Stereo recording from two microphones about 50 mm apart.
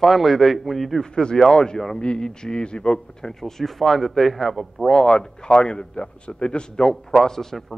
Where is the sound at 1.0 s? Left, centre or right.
Centre.